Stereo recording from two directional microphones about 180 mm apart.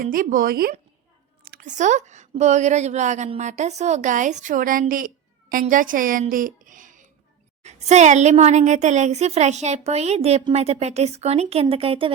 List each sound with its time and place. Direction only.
0.0 s a woman's voice: 50° right (ahead or behind)
1.5 s a woman's voice: 45° right (ahead or behind)